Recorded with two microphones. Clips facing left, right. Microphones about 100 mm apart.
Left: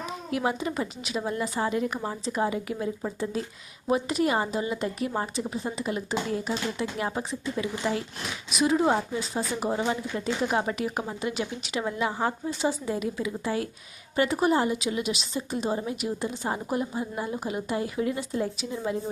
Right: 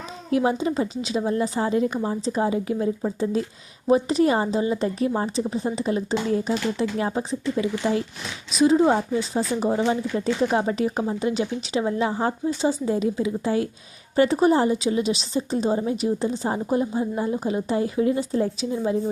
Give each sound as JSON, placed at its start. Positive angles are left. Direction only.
{"t": 0.3, "sound": "a woman's voice", "side_deg": -30}